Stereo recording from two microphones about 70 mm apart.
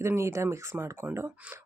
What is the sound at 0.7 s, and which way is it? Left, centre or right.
Speech, right.